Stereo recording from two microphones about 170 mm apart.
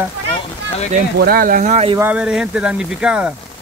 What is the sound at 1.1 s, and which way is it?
Speech, 60° right (ahead or behind).